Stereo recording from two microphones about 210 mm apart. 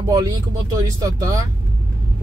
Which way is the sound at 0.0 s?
15° right (ahead or behind).